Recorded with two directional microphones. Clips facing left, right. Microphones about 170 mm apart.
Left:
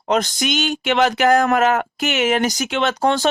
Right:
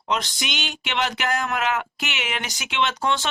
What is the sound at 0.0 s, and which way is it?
Speech, 45° left (ahead or behind).